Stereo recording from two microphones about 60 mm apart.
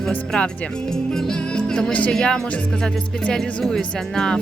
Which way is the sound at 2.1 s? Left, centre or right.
Centre.